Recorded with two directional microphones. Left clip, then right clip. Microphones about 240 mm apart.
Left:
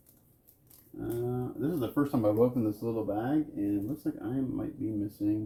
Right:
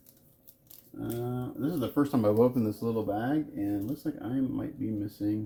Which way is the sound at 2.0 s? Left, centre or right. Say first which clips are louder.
Right 2 dB; right.